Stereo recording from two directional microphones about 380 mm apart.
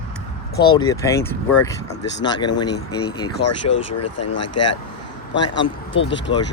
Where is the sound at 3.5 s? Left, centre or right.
Left.